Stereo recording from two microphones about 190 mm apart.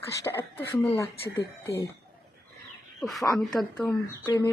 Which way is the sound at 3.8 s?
15° left (ahead or behind).